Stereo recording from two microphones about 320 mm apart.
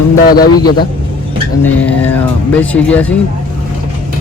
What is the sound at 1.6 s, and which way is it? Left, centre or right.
Speech, centre.